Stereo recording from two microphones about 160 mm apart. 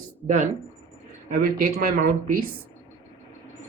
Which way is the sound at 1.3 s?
60° right (ahead or behind).